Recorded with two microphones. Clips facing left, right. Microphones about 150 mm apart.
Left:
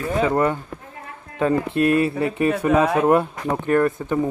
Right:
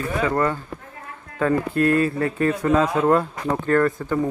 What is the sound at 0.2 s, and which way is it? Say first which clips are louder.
Speech: left 3 dB; 20° left (ahead or behind).